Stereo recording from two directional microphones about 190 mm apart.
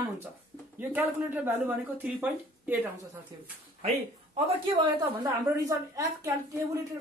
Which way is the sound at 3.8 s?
35° right (ahead or behind).